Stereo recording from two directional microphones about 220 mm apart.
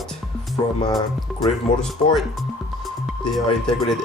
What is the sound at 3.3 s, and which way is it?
Speech, centre (ahead or behind).